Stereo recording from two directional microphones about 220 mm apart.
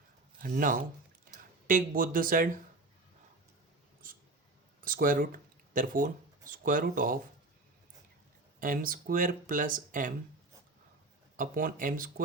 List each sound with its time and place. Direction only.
0.4 s speech: 40° right (ahead or behind)
4.8 s speech: 40° right (ahead or behind)
8.5 s speech: 40° right (ahead or behind)
11.3 s speech: 40° right (ahead or behind)